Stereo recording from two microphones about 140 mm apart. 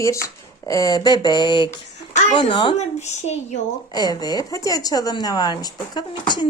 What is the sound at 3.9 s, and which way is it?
Speech, 30° left (ahead or behind).